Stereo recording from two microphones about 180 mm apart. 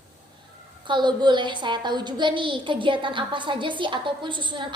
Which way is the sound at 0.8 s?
25° right (ahead or behind).